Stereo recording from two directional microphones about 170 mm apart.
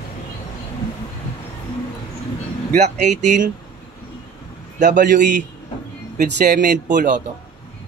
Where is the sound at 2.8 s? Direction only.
45° right (ahead or behind).